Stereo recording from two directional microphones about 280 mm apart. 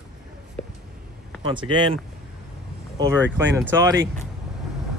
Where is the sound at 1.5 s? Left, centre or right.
Centre.